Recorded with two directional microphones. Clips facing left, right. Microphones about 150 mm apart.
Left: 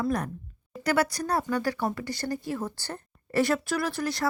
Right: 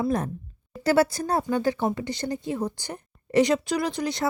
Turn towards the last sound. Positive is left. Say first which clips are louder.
# right 2 dB
turn(degrees=-20)  # may be behind; listen again after turning